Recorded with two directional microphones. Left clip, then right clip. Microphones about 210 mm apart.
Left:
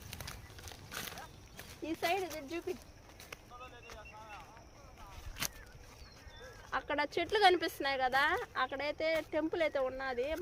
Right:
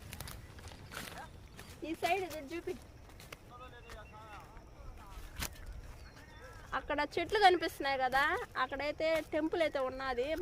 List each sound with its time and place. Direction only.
0.6 s horse: 45° left (ahead or behind)
1.8 s speech: 10° left (ahead or behind)
6.8 s speech: 10° right (ahead or behind)
8.5 s speech: 15° right (ahead or behind); by 10.4 s 40° right (ahead or behind)